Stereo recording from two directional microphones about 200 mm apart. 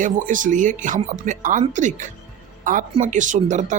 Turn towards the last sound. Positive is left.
turn(degrees=-40)  # may be behind; listen again after turning